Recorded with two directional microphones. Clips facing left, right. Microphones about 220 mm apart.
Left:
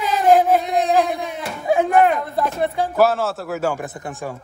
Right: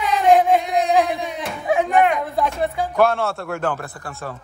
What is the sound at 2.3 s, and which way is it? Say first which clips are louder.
Speech: left 1 dB; centre (ahead or behind).